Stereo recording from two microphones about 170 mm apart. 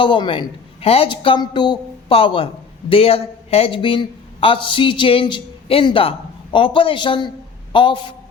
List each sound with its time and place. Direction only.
0.0 s a woman's voice: 30° left (ahead or behind)